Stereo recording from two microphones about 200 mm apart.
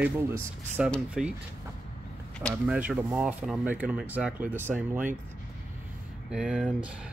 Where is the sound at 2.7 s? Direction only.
5° right (ahead or behind).